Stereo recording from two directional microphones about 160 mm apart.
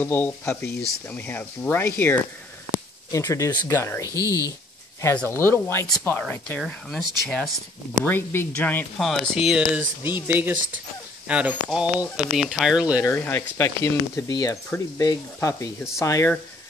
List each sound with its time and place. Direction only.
0.0 s speech: 15° left (ahead or behind)
4.1 s speech: 20° right (ahead or behind)
5.0 s speech: 10° left (ahead or behind)
8.0 s speech: 15° left (ahead or behind); by 13.0 s 5° right (ahead or behind)
13.0 s speech: 15° left (ahead or behind)